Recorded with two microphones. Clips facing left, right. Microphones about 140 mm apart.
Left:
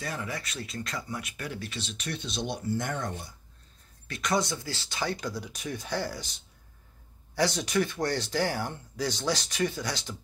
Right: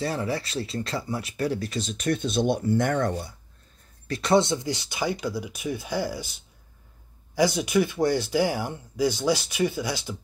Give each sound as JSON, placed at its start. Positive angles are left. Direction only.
{"t": 0.0, "sound": "speech", "side_deg": -30}
{"t": 4.1, "sound": "speech", "side_deg": -30}